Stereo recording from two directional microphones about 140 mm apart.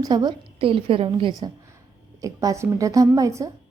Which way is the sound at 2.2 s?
25° right (ahead or behind).